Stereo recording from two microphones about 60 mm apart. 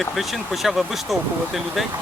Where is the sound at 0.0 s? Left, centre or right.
Centre.